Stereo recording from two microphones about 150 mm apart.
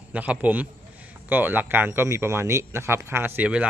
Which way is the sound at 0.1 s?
10° right (ahead or behind).